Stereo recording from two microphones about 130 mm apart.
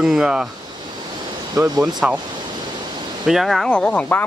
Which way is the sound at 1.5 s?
30° right (ahead or behind).